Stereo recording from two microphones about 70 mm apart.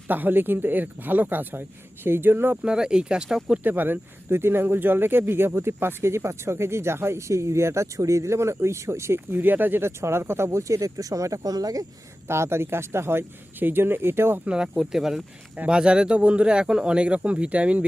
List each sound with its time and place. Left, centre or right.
0.1 s speech: right
2.6 s speech: centre
3.6 s speech: right
12.3 s speech: right
14.4 s speech: centre